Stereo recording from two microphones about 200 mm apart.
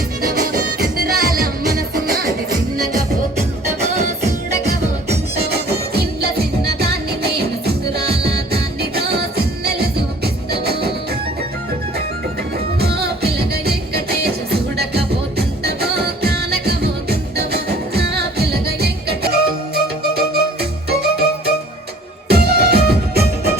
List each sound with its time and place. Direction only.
0.2 s music: 50° right (ahead or behind)
3.8 s music: 35° right (ahead or behind)
5.5 s music: 55° right (ahead or behind)
10.5 s music: 50° right (ahead or behind)
12.8 s music: 55° right (ahead or behind)